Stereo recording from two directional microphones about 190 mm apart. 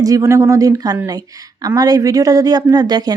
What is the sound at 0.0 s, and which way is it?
Speech, 15° right (ahead or behind).